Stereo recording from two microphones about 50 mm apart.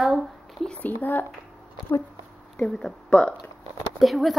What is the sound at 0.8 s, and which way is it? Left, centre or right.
Speech, left.